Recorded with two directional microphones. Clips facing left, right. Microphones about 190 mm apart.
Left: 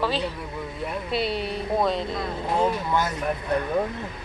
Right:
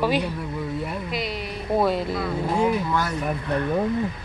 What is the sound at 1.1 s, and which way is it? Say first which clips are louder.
Speech: left 6 dB; 30° left (ahead or behind).